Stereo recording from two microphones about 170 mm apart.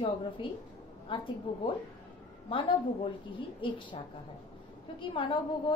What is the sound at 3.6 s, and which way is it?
Speech, 30° left (ahead or behind).